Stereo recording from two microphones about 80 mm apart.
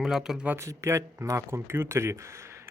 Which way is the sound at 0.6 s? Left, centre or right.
Right.